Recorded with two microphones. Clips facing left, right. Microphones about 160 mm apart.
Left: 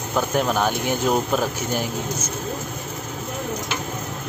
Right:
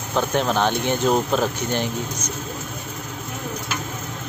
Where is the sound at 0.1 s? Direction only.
5° left (ahead or behind).